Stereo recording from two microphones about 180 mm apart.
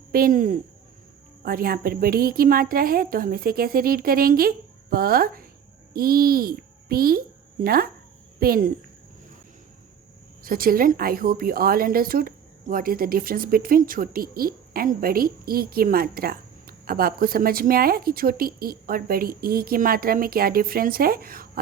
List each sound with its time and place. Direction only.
0.1 s a woman's voice: 50° right (ahead or behind)
10.4 s a woman's voice: 55° right (ahead or behind)